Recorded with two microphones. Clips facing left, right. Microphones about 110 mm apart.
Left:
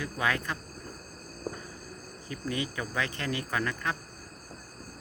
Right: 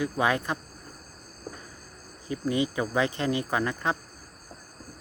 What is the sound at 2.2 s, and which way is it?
Speech, 20° right (ahead or behind).